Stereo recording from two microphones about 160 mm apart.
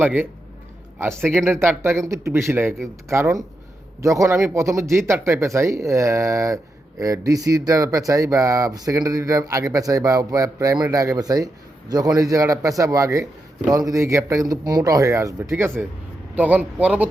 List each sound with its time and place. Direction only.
0.0 s speech: 10° right (ahead or behind)